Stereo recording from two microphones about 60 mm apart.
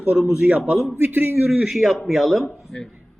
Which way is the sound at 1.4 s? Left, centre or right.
Centre.